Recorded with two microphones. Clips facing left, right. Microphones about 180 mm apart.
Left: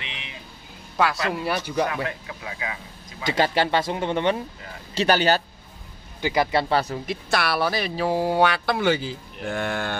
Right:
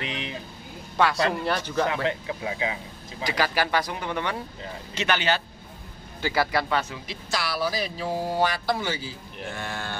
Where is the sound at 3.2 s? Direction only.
25° left (ahead or behind).